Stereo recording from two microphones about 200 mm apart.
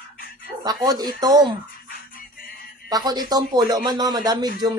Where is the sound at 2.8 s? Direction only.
20° right (ahead or behind).